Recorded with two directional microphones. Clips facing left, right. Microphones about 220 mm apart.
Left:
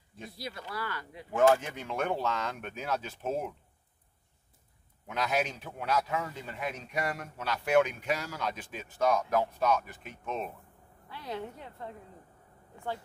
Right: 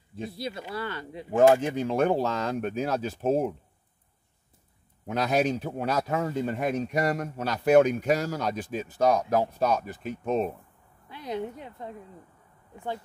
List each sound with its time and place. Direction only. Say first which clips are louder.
0.1 s speech: right 8 dB; 25° right (ahead or behind)
5.0 s speech: right 6 dB; 40° right (ahead or behind)
11.1 s a woman's voice: right 6 dB; 15° right (ahead or behind)